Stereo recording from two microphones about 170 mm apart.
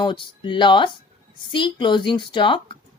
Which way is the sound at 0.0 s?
30° left (ahead or behind).